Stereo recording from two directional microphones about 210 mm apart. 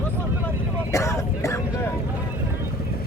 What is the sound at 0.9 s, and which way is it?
Vehicle, 15° left (ahead or behind).